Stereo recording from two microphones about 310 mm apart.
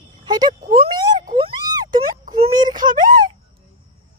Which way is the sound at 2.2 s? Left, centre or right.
Right.